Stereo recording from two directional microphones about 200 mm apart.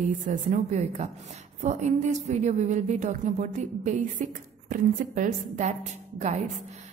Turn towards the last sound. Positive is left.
turn(degrees=-35)  # may be behind; listen again after turning